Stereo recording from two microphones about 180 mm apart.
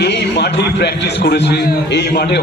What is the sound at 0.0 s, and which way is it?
A man's voice, 70° left (ahead or behind).